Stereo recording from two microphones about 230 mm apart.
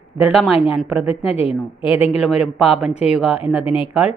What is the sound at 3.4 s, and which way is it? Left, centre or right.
Speech, left.